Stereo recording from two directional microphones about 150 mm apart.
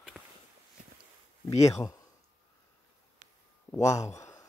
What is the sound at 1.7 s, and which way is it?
Speech, 20° left (ahead or behind).